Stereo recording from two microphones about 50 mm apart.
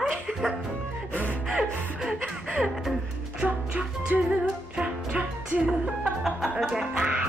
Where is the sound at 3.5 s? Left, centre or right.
Right.